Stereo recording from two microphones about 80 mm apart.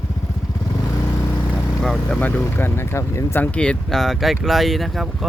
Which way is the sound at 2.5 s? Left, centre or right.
Left.